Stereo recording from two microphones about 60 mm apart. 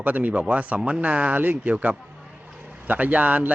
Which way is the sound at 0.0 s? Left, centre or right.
Right.